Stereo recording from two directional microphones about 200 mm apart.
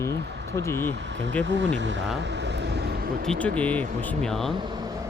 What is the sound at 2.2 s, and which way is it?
Vehicle, 60° right (ahead or behind).